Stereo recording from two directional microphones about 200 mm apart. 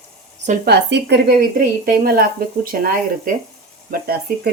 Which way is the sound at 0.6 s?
55° right (ahead or behind).